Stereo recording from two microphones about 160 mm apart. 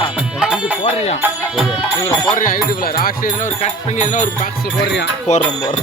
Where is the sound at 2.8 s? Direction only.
65° left (ahead or behind).